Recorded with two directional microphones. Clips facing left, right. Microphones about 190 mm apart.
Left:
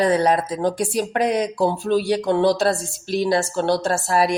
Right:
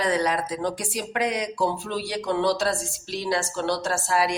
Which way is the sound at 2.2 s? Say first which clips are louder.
Left 6 dB; 45° left (ahead or behind).